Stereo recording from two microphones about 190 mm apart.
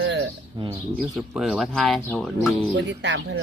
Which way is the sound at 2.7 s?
70° right (ahead or behind).